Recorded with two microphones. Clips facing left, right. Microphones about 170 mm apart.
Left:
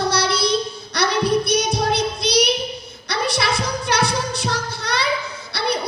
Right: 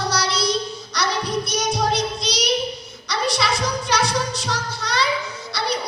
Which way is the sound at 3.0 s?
60° left (ahead or behind).